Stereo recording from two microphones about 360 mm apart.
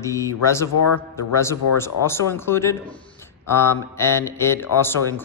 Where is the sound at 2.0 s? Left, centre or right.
Centre.